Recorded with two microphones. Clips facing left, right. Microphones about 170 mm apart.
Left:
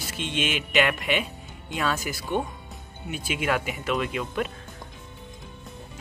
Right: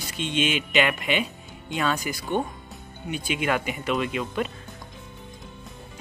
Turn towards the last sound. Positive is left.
turn(degrees=0)  # may be behind; listen again after turning